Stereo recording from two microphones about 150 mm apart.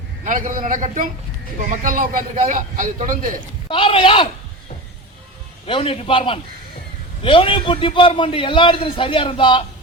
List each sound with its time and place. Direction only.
0.3 s a man's voice: 60° right (ahead or behind)
3.7 s a man's voice: 35° left (ahead or behind)
5.6 s a man's voice: 35° left (ahead or behind)